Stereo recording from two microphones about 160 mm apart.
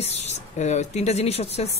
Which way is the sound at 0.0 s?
40° left (ahead or behind).